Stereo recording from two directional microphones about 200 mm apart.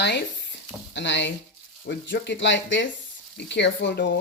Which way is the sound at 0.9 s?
65° left (ahead or behind).